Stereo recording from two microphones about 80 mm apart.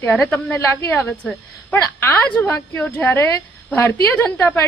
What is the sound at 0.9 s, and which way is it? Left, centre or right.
A woman's voice, left.